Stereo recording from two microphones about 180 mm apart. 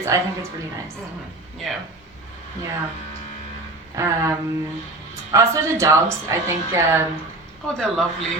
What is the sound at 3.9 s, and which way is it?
A woman's voice, 15° right (ahead or behind).